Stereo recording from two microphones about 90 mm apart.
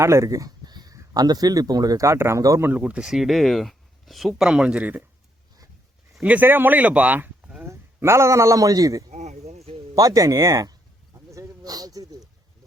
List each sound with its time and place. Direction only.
0.0 s a sound: 35° right (ahead or behind); by 0.9 s 50° right (ahead or behind)
0.9 s speech: 45° right (ahead or behind)
2.6 s speech: 15° right (ahead or behind)
6.2 s speech: 20° right (ahead or behind)
7.6 s a man's voice: 25° right (ahead or behind)
9.9 s a sound: 40° right (ahead or behind)